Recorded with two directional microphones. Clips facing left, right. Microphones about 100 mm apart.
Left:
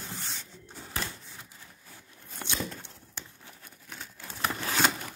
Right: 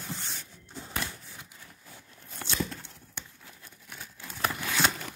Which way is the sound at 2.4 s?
20° left (ahead or behind).